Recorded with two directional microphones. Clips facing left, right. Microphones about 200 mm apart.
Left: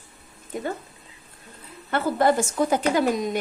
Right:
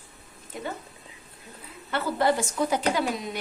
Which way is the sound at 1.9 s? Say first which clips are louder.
Left 4 dB; 50° left (ahead or behind).